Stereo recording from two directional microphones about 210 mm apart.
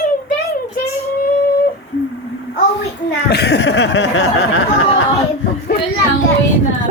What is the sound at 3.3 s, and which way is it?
Speech, 50° left (ahead or behind).